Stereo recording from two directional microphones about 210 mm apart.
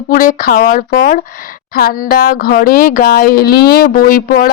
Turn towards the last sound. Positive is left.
turn(degrees=45)  # may be behind; listen again after turning